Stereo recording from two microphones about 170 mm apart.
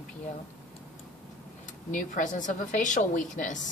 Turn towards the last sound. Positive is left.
turn(degrees=50)  # may be behind; listen again after turning